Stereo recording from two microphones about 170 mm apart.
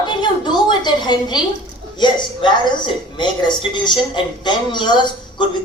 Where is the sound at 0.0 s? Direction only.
25° left (ahead or behind).